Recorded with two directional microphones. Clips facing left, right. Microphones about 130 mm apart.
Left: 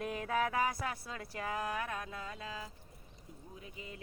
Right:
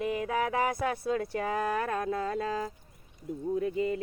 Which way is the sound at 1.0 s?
25° right (ahead or behind).